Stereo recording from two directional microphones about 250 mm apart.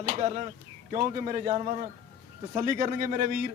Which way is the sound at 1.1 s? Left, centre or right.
Right.